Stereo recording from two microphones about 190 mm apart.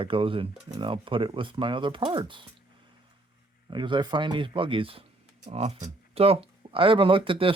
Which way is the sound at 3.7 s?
25° right (ahead or behind).